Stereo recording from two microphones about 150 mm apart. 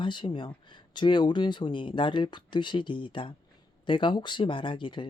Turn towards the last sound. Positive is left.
turn(degrees=30)  # may be behind; listen again after turning